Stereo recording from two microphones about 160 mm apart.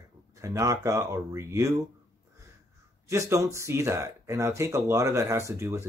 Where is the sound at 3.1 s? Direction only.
20° right (ahead or behind).